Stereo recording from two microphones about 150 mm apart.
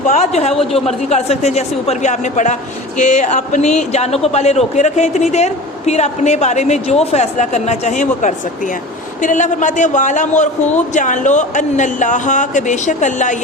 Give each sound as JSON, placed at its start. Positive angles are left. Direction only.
{"t": 0.0, "sound": "a man's voice", "side_deg": 50}